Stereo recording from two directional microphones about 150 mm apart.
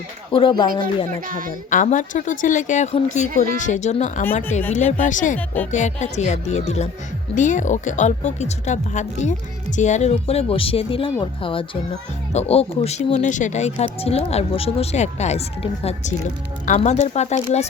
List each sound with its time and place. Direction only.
0.3 s speech: 35° left (ahead or behind)
1.3 s a woman's voice: 65° right (ahead or behind)
1.7 s speech: 55° left (ahead or behind)
3.2 s a woman's voice: 70° right (ahead or behind)
3.6 s speech: 50° left (ahead or behind)
7.3 s speech: 60° left (ahead or behind); by 11.8 s 35° left (ahead or behind)
12.3 s speech: 45° left (ahead or behind)